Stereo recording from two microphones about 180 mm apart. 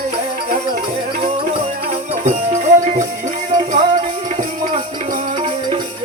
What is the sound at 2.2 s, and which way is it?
Music, 40° right (ahead or behind).